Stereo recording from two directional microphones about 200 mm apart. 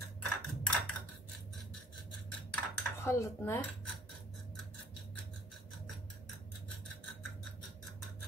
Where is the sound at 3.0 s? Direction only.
15° left (ahead or behind).